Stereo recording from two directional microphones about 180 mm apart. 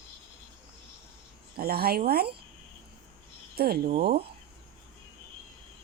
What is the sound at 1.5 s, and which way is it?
Speech, 60° right (ahead or behind).